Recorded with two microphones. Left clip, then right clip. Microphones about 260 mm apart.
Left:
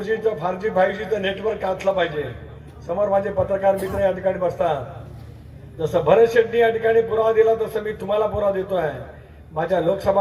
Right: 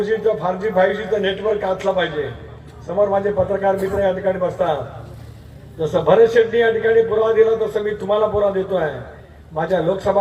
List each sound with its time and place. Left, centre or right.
0.0 s a man's voice: left
5.8 s a man's voice: left